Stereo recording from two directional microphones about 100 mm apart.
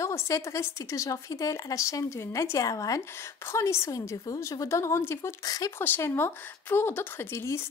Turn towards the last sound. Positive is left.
turn(degrees=25)  # may be behind; listen again after turning